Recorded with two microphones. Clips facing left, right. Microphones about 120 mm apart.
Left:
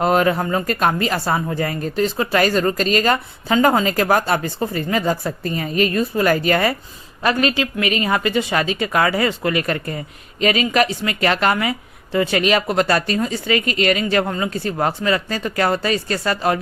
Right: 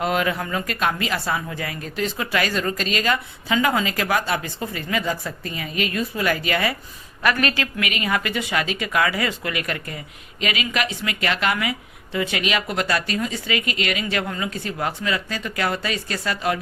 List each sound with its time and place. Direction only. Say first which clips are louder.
0.0 s speech: left 6 dB; 40° left (ahead or behind)
7.2 s speech: left 3 dB; 25° left (ahead or behind); by 16.6 s 40° left (ahead or behind)